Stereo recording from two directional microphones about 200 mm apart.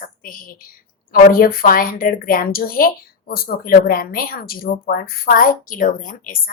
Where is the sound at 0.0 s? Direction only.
45° left (ahead or behind).